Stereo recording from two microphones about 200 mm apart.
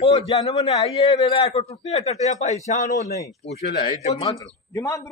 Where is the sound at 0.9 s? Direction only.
30° left (ahead or behind).